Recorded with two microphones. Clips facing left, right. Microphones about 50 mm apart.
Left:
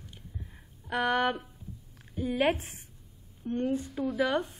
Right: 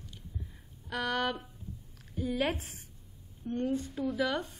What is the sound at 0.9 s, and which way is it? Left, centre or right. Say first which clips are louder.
A woman's voice: left 5 dB; left.